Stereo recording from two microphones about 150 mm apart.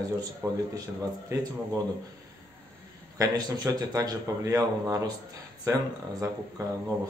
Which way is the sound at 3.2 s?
25° right (ahead or behind).